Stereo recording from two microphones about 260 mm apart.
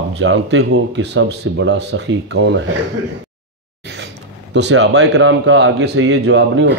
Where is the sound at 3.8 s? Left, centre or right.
Right.